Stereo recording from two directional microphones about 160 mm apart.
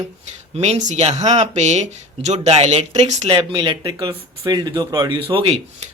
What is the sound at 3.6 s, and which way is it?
Speech, 25° right (ahead or behind).